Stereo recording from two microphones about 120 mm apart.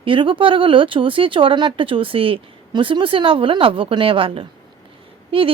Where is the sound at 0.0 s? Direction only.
45° right (ahead or behind).